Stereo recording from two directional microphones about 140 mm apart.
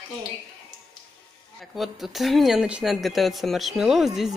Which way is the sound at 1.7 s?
Centre (ahead or behind).